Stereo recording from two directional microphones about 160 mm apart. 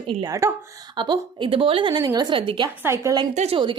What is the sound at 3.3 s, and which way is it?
Speech, 40° right (ahead or behind).